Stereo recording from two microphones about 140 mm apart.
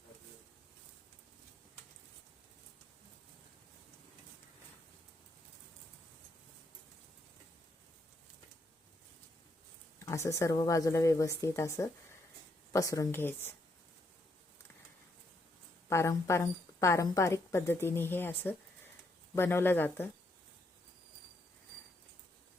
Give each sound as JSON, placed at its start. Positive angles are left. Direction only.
{"t": 10.0, "sound": "a woman's voice", "side_deg": 20}
{"t": 15.9, "sound": "a woman's voice", "side_deg": 20}